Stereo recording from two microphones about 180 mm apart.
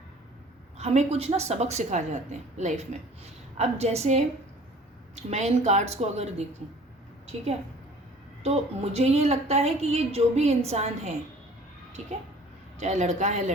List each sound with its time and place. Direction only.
0.8 s a woman's voice: 35° right (ahead or behind)
8.4 s a woman's voice: 35° right (ahead or behind)
12.8 s a woman's voice: 40° right (ahead or behind)